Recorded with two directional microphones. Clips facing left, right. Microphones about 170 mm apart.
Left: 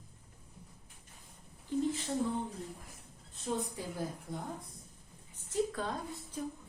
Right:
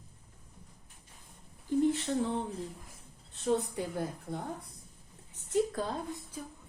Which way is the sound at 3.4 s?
65° right (ahead or behind).